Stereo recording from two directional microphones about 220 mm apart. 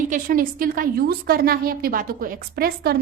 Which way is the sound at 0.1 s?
40° right (ahead or behind).